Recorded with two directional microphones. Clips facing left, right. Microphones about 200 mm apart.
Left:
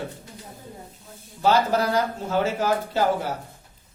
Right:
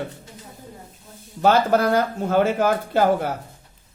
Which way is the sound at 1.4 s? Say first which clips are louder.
Right 3 dB; 55° right (ahead or behind).